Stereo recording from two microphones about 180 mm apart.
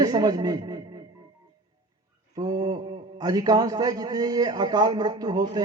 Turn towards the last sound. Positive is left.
turn(degrees=-25)  # may be behind; listen again after turning